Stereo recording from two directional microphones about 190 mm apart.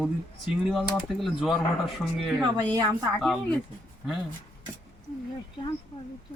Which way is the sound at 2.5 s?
20° right (ahead or behind).